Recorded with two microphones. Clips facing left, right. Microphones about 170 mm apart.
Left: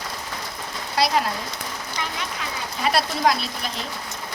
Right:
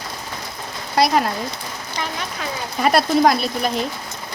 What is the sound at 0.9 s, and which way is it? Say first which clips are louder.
Speech: right 4 dB; 50° right (ahead or behind).